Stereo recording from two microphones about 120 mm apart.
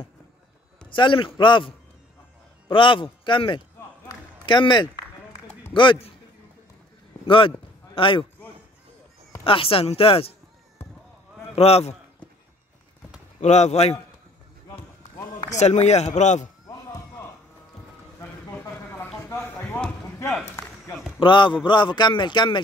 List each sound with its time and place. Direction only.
0.8 s a man's voice: 45° left (ahead or behind)
2.7 s a man's voice: 45° left (ahead or behind)
7.2 s a man's voice: 45° left (ahead or behind)
9.4 s a man's voice: 50° left (ahead or behind)
11.5 s a man's voice: 60° left (ahead or behind)
13.4 s speech: 70° left (ahead or behind)
15.5 s speech: 65° left (ahead or behind)
18.5 s a sound: 20° left (ahead or behind)
21.2 s speech: 40° left (ahead or behind)